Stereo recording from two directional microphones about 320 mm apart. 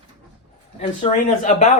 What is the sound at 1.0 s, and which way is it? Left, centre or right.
Speech, left.